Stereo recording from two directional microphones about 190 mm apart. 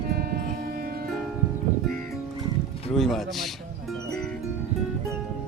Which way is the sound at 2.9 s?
Centre (ahead or behind).